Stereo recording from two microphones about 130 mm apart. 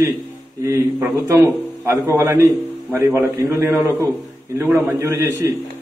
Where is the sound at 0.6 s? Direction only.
20° right (ahead or behind).